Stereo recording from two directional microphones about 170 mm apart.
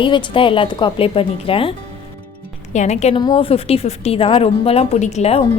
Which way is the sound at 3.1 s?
25° left (ahead or behind).